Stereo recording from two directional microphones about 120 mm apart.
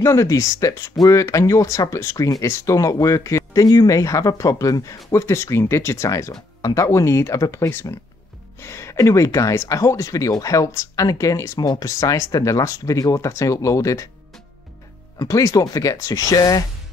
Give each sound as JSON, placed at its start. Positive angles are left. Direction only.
{"t": 0.0, "sound": "speech", "side_deg": 25}
{"t": 15.1, "sound": "speech", "side_deg": 25}